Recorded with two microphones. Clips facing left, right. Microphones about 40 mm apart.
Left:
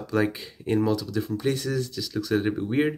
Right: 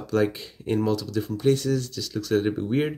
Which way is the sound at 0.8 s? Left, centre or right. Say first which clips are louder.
Even; centre.